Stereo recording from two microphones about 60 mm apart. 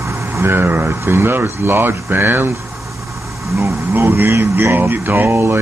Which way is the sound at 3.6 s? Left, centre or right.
Right.